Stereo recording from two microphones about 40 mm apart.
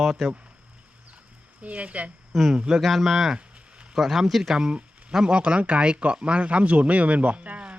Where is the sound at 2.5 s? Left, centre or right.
Right.